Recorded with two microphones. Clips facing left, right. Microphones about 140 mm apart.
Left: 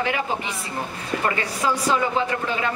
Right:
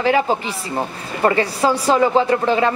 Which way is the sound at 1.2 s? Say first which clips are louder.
Right 9 dB; 35° right (ahead or behind).